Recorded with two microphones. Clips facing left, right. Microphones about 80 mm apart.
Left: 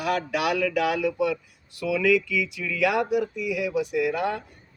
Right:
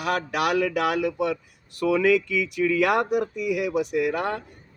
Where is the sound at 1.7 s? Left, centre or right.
Right.